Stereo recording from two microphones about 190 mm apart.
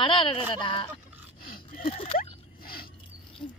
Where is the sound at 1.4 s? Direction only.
50° left (ahead or behind).